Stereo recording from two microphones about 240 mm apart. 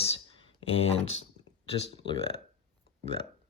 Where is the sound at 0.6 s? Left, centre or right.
Left.